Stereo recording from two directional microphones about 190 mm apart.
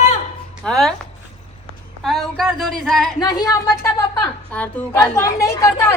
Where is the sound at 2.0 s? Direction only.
Centre (ahead or behind).